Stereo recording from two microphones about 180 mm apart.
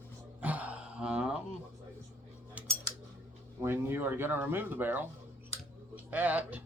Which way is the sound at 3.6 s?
15° right (ahead or behind).